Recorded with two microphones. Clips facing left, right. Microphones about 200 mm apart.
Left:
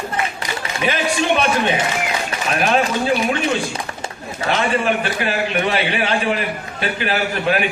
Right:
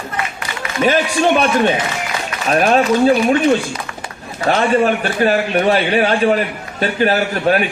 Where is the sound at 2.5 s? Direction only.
40° right (ahead or behind).